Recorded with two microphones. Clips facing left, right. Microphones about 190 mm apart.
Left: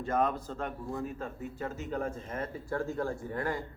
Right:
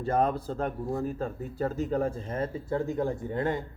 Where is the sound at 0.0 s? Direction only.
35° right (ahead or behind).